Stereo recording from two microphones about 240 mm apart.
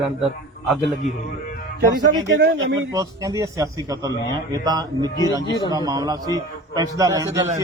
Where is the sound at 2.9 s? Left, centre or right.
Centre.